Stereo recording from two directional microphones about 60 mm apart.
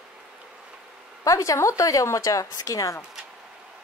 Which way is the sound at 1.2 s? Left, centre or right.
Left.